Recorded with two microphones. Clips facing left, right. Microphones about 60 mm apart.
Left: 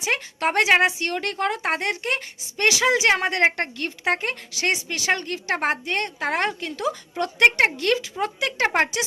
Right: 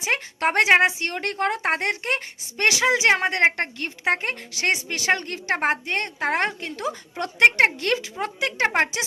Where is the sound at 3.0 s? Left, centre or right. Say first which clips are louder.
Right 1 dB; right.